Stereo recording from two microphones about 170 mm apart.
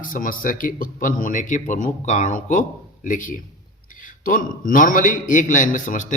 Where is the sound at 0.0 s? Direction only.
50° left (ahead or behind).